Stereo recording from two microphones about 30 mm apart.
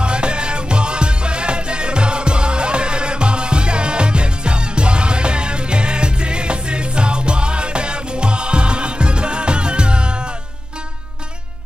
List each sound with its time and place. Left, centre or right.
0.0 s music: right